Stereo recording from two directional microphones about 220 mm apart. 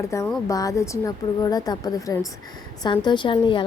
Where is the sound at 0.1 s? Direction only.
15° left (ahead or behind).